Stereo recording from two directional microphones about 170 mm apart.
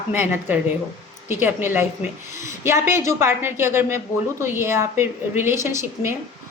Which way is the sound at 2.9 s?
15° right (ahead or behind).